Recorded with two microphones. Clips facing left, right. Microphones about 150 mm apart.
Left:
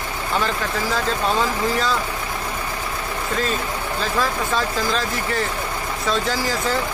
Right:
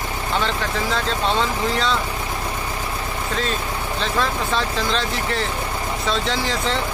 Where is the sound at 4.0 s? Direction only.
5° left (ahead or behind).